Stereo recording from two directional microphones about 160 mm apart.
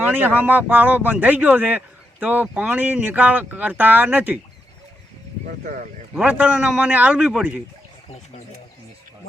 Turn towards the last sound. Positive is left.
turn(degrees=-10)  # may be behind; listen again after turning